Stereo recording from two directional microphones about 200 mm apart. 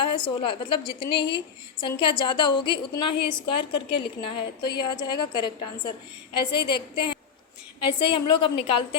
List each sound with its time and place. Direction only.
0.0 s a woman's voice: 25° left (ahead or behind)